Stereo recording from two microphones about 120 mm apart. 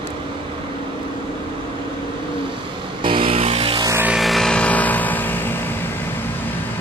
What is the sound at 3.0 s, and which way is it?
Vehicle, 50° right (ahead or behind).